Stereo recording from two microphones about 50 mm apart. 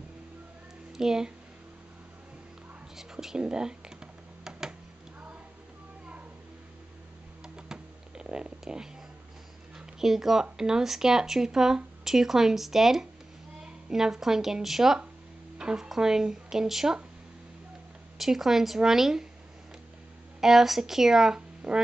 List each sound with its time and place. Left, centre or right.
0.9 s speech: centre
3.0 s a sound: centre
7.4 s a sound: centre
10.4 s speech: centre
18.1 s a woman's voice: centre
20.3 s speech: centre